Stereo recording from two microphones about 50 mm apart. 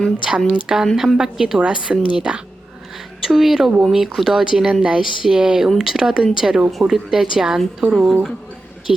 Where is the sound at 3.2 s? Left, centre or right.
Centre.